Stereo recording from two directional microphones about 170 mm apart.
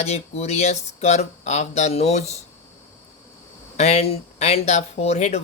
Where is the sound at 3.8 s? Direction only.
35° left (ahead or behind).